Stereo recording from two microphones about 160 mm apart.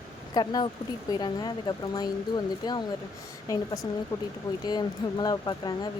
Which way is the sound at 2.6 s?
25° left (ahead or behind).